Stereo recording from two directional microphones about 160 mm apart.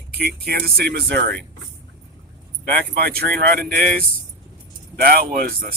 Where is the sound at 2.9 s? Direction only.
75° right (ahead or behind).